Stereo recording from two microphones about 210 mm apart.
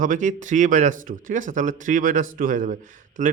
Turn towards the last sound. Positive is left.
turn(degrees=-35)  # may be behind; listen again after turning